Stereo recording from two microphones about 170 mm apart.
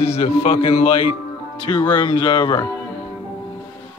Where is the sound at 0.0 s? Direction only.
35° left (ahead or behind).